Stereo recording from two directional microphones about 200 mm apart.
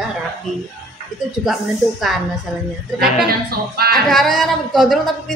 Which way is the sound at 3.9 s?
Centre (ahead or behind).